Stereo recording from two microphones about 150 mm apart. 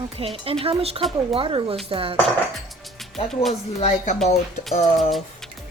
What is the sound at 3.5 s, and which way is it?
Speech, 45° left (ahead or behind).